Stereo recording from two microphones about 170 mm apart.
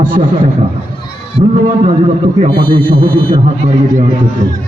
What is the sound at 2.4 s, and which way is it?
Speech, 30° right (ahead or behind).